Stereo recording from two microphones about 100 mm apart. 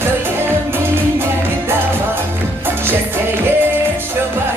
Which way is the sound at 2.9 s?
20° right (ahead or behind).